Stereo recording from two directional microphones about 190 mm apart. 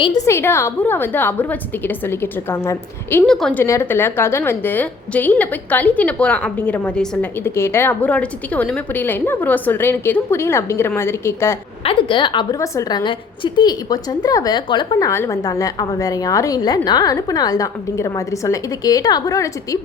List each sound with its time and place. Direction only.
0.0 s a woman's voice: 20° left (ahead or behind)
11.8 s a woman's voice: 30° left (ahead or behind)